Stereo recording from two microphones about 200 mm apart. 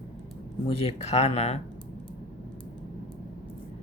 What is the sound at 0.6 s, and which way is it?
Speech, 30° left (ahead or behind).